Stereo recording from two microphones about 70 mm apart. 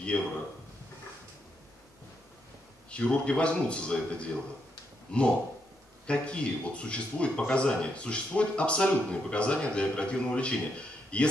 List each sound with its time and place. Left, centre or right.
0.1 s speech: centre
2.9 s speech: centre